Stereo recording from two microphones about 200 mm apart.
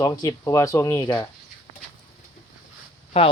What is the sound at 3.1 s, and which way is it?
Speech, 25° left (ahead or behind).